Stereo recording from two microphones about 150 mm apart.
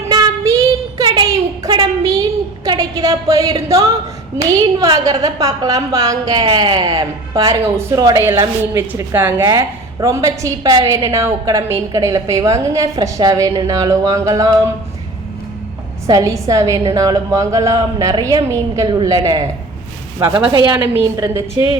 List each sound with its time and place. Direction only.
0.1 s child singing: 20° right (ahead or behind)
1.1 s a sound: 25° right (ahead or behind)
2.6 s a woman's voice: 25° right (ahead or behind)
5.2 s a woman's voice: 25° right (ahead or behind)
9.4 s a woman's voice: 25° right (ahead or behind)
16.0 s a woman's voice: 25° right (ahead or behind)